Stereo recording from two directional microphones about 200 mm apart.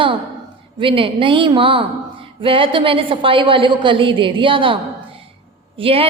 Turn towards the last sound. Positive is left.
turn(degrees=-30)  # may be behind; listen again after turning